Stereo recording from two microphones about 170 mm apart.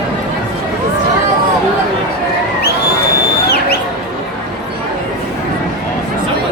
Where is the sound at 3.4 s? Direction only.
70° left (ahead or behind).